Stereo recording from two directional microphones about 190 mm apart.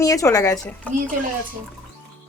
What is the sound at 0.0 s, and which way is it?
Speech, 15° left (ahead or behind).